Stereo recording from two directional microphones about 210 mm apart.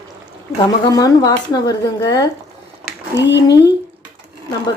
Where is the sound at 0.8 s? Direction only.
20° left (ahead or behind).